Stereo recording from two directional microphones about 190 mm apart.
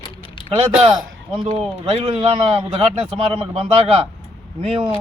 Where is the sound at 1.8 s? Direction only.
30° right (ahead or behind).